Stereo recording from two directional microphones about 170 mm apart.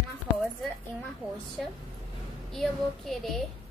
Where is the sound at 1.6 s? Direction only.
Centre (ahead or behind).